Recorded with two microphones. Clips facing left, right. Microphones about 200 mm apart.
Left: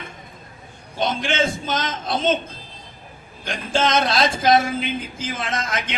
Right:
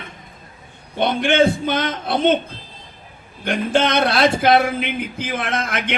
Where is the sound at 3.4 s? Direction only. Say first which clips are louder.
Right 4 dB; 60° right (ahead or behind).